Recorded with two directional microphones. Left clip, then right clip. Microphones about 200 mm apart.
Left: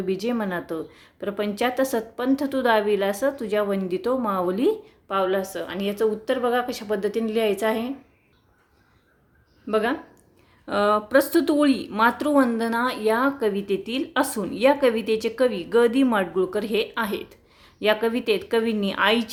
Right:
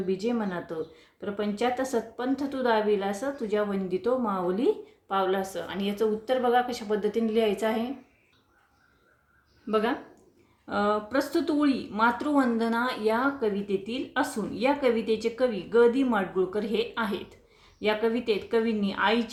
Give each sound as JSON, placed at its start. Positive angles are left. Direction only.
{"t": 0.1, "sound": "speech", "side_deg": 35}
{"t": 9.6, "sound": "speech", "side_deg": 25}